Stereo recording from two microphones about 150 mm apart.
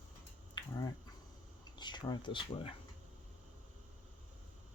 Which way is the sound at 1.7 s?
30° left (ahead or behind).